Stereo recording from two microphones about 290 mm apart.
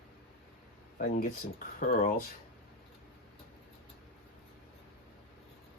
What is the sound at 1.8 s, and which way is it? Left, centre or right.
Speech, left.